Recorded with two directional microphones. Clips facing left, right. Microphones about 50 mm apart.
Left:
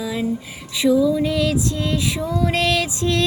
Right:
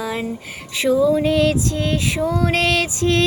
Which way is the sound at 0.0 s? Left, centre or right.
Right.